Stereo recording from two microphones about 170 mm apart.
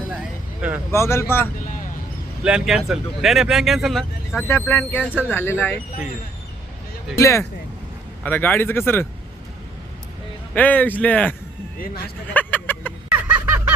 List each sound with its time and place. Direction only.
0.1 s a sound: 10° right (ahead or behind)
0.9 s speech: 15° left (ahead or behind)
1.5 s vehicle: 50° left (ahead or behind)
2.4 s speech: 5° right (ahead or behind)
4.4 s speech: 15° left (ahead or behind)
7.2 s speech: 15° left (ahead or behind)
10.5 s speech: 10° left (ahead or behind)
11.8 s speech: 60° left (ahead or behind)
12.3 s a sound: 10° left (ahead or behind)
13.1 s a sound: 15° right (ahead or behind)